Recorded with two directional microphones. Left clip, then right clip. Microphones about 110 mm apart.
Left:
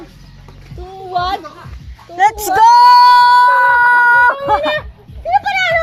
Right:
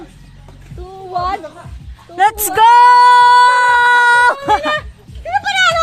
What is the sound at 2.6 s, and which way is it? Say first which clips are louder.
Singing: even; 35° right (ahead or behind).